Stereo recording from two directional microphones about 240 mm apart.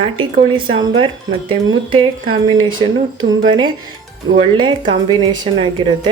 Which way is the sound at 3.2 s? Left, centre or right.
Right.